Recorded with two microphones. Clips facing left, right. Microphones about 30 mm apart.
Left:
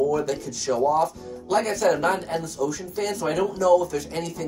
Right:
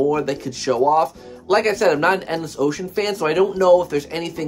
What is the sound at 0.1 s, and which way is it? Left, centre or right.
Speech, right.